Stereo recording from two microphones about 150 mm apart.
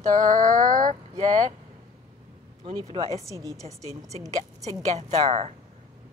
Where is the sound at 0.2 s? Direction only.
60° right (ahead or behind).